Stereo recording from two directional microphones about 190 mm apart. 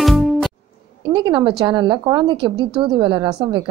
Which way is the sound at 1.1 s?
25° right (ahead or behind).